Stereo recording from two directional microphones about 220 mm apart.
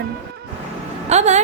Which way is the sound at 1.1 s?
30° right (ahead or behind).